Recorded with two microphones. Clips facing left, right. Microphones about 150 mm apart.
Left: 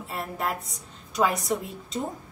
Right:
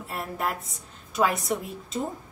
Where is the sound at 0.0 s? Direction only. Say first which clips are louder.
Even; centre (ahead or behind).